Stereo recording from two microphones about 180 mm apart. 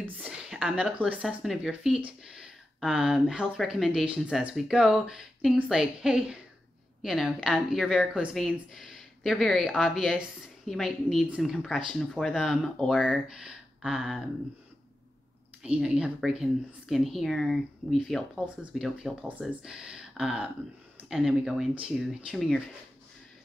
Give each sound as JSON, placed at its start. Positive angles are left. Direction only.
{"t": 0.0, "sound": "a woman's voice", "side_deg": -5}
{"t": 15.6, "sound": "a woman's voice", "side_deg": -5}